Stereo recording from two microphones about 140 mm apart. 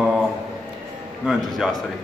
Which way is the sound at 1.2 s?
Centre (ahead or behind).